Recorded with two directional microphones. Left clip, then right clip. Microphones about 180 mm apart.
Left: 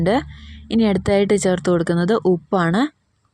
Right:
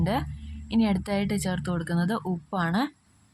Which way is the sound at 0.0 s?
30° left (ahead or behind).